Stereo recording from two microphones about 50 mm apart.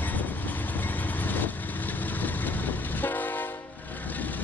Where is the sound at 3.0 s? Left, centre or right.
Left.